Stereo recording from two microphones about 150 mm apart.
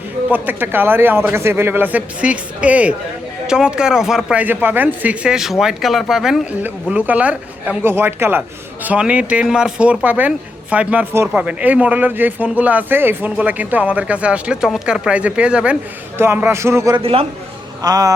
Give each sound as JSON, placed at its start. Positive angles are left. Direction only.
{"t": 0.3, "sound": "speech", "side_deg": -10}
{"t": 17.0, "sound": "a man's voice", "side_deg": -40}
{"t": 17.8, "sound": "a sound", "side_deg": -25}